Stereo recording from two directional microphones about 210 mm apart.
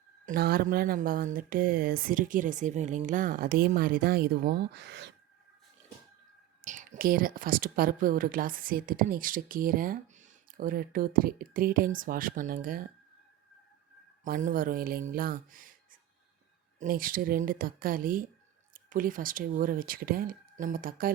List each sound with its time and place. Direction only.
0.3 s speech: 45° right (ahead or behind)
6.7 s a woman's voice: 40° right (ahead or behind)
14.3 s a woman's voice: 40° right (ahead or behind)